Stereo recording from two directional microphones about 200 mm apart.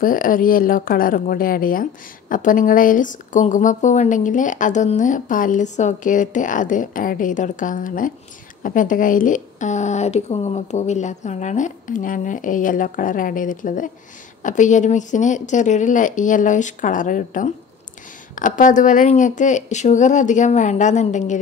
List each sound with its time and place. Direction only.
0.0 s speech: 45° left (ahead or behind)